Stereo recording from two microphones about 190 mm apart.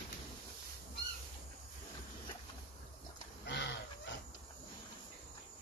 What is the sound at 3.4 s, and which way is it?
Chicken, 65° left (ahead or behind).